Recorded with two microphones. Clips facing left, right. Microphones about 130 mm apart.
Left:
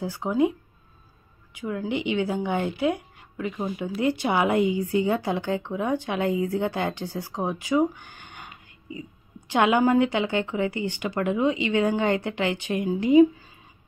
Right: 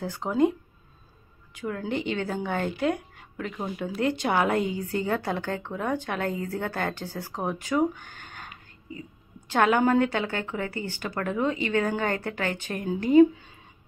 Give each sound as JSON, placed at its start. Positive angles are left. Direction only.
{"t": 0.0, "sound": "a woman's voice", "side_deg": 15}
{"t": 1.6, "sound": "a woman's voice", "side_deg": 10}
{"t": 9.5, "sound": "a woman's voice", "side_deg": 15}